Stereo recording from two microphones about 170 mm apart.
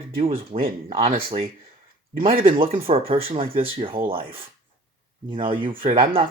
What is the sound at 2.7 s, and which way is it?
Speech, 35° right (ahead or behind).